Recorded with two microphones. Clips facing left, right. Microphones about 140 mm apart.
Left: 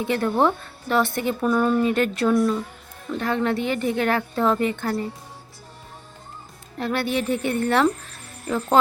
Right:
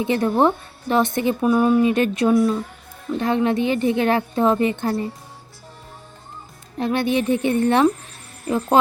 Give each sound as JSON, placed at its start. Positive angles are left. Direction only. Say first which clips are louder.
{"t": 0.0, "sound": "a woman's voice", "louder": "right 3 dB", "side_deg": -20}
{"t": 6.7, "sound": "a woman's voice", "louder": "right 4 dB", "side_deg": -20}